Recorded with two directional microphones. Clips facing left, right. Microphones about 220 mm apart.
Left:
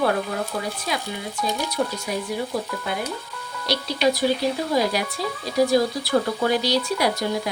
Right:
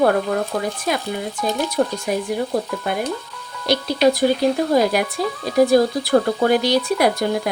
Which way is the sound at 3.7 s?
50° right (ahead or behind).